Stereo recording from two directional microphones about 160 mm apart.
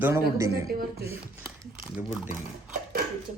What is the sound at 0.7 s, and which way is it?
Speech, 70° right (ahead or behind).